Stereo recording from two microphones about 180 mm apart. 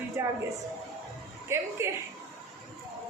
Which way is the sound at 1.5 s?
15° right (ahead or behind).